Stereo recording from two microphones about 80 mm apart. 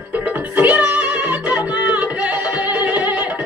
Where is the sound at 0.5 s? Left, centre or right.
Right.